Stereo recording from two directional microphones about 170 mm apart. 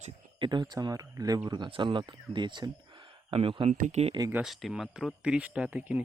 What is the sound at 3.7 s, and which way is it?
Speech, 45° right (ahead or behind).